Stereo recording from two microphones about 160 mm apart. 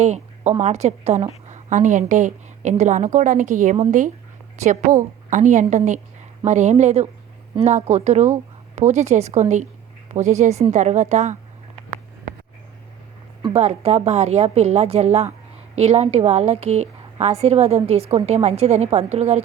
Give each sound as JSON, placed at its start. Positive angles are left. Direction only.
{"t": 0.0, "sound": "a woman's voice", "side_deg": -45}
{"t": 13.5, "sound": "a woman's voice", "side_deg": -40}